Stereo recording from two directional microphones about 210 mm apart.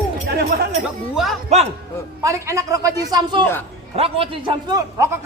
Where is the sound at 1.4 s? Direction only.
30° right (ahead or behind).